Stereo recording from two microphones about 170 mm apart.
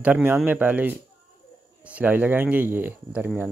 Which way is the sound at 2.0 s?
10° right (ahead or behind).